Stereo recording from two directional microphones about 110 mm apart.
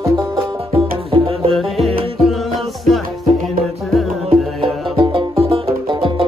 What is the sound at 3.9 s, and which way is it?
Music, centre (ahead or behind).